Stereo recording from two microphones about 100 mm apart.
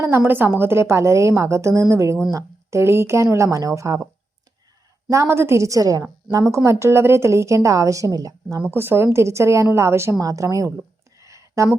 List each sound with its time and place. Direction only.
0.3 s a woman's voice: 20° right (ahead or behind)
5.1 s a woman's voice: 30° right (ahead or behind)
8.7 s a woman's voice: 20° right (ahead or behind)
11.2 s a sound: 30° right (ahead or behind)